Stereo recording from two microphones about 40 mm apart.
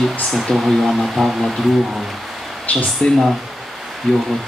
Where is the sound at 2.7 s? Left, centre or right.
Left.